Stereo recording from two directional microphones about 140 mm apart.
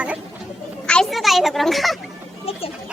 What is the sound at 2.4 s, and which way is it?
Speech, 45° left (ahead or behind).